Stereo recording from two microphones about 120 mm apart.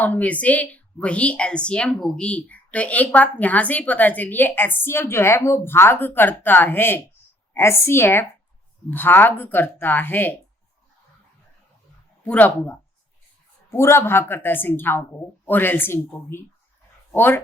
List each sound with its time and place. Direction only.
0.0 s a woman's voice: 15° left (ahead or behind)
12.2 s a woman's voice: 15° left (ahead or behind)